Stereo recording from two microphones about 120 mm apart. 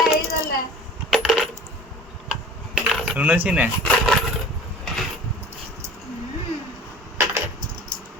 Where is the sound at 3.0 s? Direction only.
10° right (ahead or behind).